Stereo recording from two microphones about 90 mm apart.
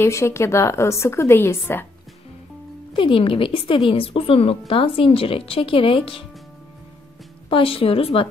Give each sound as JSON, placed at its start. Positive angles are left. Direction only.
{"t": 0.0, "sound": "a woman's voice", "side_deg": 30}
{"t": 2.9, "sound": "speech", "side_deg": 80}
{"t": 7.4, "sound": "a woman's voice", "side_deg": 85}